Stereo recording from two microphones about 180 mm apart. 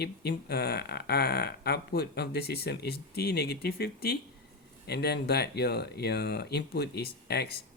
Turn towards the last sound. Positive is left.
turn(degrees=60)  # may be behind; listen again after turning